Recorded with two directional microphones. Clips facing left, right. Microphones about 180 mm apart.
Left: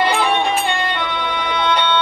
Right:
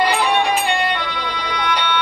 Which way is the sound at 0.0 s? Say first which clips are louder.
Even; 25° left (ahead or behind).